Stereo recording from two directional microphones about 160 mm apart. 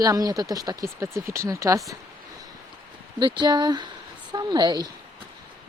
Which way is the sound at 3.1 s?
30° right (ahead or behind).